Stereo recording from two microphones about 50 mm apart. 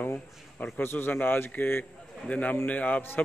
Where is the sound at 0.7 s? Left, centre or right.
Left.